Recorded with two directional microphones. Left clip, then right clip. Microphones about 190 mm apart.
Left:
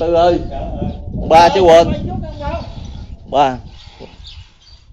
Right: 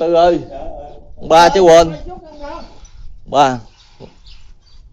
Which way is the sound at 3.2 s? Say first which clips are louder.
Right 1 dB; 45° right (ahead or behind).